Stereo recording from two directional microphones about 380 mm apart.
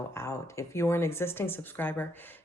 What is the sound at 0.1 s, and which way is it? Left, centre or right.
Speech, centre.